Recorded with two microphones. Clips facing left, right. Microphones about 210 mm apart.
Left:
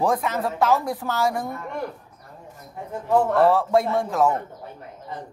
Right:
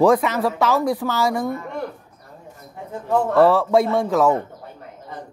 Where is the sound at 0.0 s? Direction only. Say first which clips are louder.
Right 7 dB; 80° right.